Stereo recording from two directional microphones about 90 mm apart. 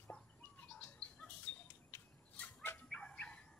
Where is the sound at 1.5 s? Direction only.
20° left (ahead or behind).